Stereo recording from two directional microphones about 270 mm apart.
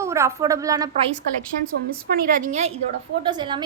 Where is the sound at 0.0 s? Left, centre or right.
Centre.